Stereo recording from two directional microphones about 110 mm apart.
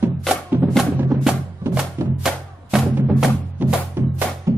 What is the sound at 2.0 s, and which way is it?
Music, 25° right (ahead or behind).